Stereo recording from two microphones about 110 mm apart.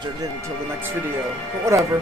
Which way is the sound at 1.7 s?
25° right (ahead or behind).